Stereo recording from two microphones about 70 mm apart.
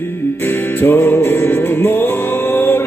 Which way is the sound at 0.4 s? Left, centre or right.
Left.